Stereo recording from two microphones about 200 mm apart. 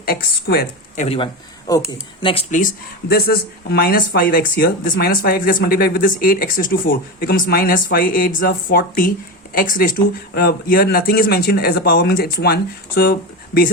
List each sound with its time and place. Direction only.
0.0 s speech: 50° left (ahead or behind)
0.9 s speech: 30° left (ahead or behind); by 13.7 s 50° left (ahead or behind)